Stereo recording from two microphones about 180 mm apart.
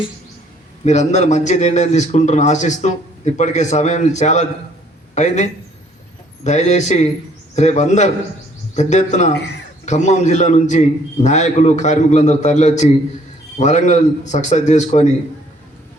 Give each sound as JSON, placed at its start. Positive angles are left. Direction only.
{"t": 0.9, "sound": "a man's voice", "side_deg": 40}